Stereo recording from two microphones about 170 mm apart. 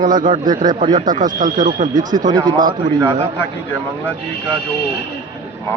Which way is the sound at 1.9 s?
25° right (ahead or behind).